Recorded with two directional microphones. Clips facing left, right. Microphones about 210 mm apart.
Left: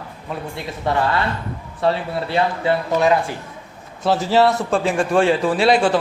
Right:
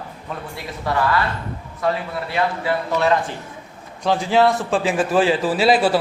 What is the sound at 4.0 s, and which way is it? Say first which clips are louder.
A man's voice: left 1 dB; 5° left (ahead or behind).